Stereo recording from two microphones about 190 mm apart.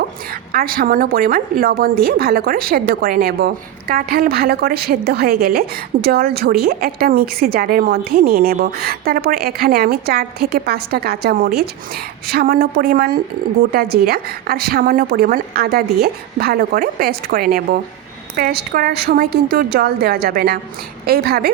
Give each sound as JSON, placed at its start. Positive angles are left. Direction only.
{"t": 0.5, "sound": "a woman's voice", "side_deg": -50}